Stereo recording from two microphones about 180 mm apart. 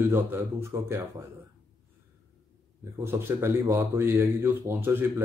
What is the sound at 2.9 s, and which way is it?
Speech, 10° right (ahead or behind).